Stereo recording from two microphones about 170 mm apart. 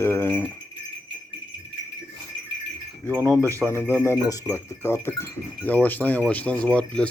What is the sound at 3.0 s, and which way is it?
Speech, 15° right (ahead or behind).